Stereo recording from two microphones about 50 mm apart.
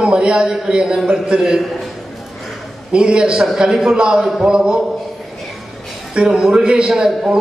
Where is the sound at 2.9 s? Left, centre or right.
Centre.